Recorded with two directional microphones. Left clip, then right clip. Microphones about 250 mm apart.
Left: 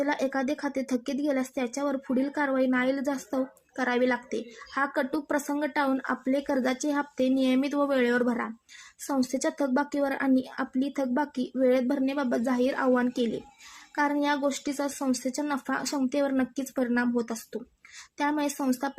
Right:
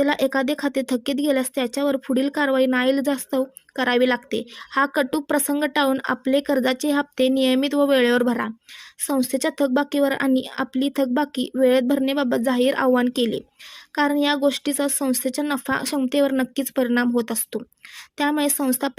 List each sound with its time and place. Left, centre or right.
0.0 s speech: right